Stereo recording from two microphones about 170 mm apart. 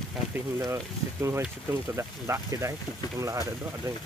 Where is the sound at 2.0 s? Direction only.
15° right (ahead or behind).